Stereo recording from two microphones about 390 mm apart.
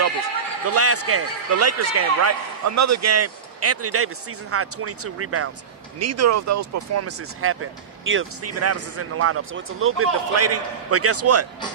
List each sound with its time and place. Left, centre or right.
0.6 s speech: right